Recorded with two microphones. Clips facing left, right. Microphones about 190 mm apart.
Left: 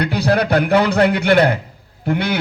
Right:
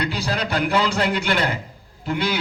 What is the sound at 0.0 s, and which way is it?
A man's voice, 60° left (ahead or behind).